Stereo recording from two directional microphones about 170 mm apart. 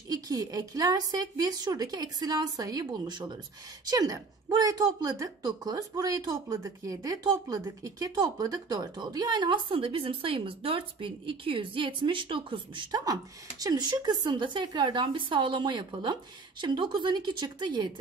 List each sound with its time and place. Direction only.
0.1 s speech: 20° right (ahead or behind)